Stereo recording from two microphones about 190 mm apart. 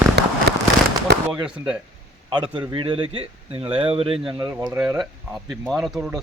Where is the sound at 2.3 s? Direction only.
25° right (ahead or behind).